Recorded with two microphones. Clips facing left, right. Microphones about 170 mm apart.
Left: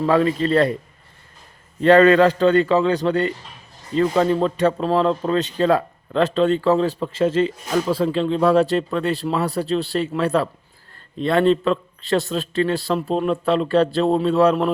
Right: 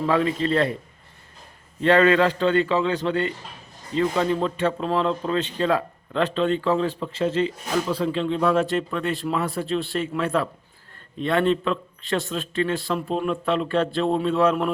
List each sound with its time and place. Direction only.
0.0 s speech: 40° left (ahead or behind)
1.8 s a man's voice: 40° left (ahead or behind)